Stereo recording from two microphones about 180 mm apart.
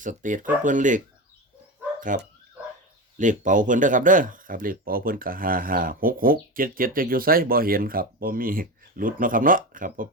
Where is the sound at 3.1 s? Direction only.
45° right (ahead or behind).